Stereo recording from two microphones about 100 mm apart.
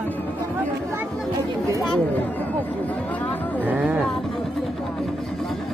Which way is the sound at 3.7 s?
15° right (ahead or behind).